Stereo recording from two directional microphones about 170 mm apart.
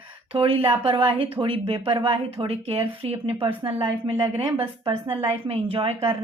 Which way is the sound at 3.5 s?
15° right (ahead or behind).